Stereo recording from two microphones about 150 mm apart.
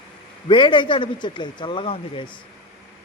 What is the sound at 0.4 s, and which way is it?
Speech, 35° left (ahead or behind).